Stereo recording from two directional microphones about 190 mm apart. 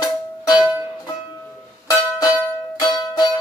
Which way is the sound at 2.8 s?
20° left (ahead or behind).